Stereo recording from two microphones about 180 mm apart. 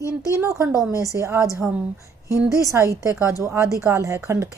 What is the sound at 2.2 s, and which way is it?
Speech, 20° left (ahead or behind).